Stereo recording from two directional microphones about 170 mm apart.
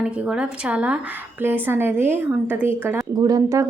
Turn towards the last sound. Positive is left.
turn(degrees=-20)  # may be behind; listen again after turning